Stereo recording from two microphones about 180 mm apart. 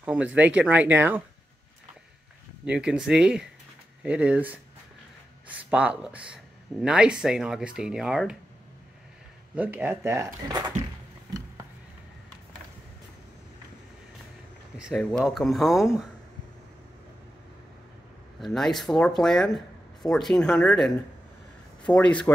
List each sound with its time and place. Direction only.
0.0 s speech: 5° right (ahead or behind)
2.6 s speech: 5° right (ahead or behind)
5.7 s speech: 5° right (ahead or behind)
9.6 s speech: 10° right (ahead or behind)
14.8 s speech: centre (ahead or behind)
18.4 s speech: centre (ahead or behind)